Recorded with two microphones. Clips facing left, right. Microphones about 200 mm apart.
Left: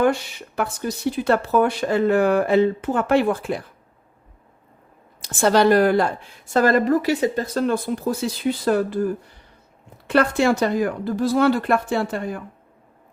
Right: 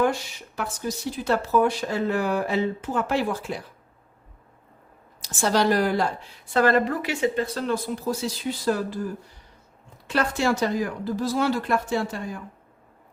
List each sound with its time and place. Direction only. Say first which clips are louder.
0.0 s a woman's voice: left 4 dB; 60° left (ahead or behind)
5.2 s a woman's voice: left 5 dB; 60° left (ahead or behind)